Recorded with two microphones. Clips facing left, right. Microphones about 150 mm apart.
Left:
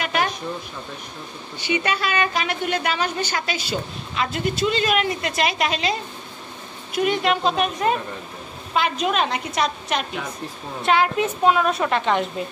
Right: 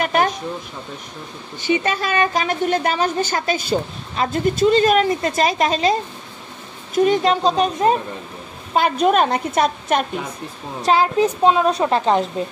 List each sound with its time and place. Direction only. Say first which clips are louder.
0.0 s a sound: right 5 dB; 45° right (ahead or behind)
1.9 s a woman's voice: right 3 dB; 40° right (ahead or behind)
7.0 s a woman's voice: right 5 dB; 35° right (ahead or behind)
8.7 s a woman's voice: right 6 dB; 45° right (ahead or behind)
10.8 s a woman's voice: right 3 dB; 35° right (ahead or behind)